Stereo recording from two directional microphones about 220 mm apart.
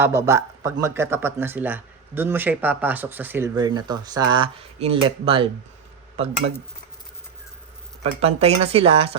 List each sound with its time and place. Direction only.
0.0 s speech: 10° right (ahead or behind)
8.2 s speech: 30° right (ahead or behind)